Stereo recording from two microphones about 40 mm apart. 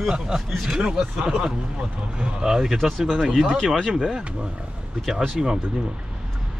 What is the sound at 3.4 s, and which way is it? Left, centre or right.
Speech, centre.